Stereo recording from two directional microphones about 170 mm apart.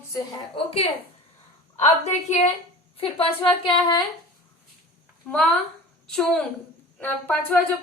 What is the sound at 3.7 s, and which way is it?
Speech, 30° left (ahead or behind).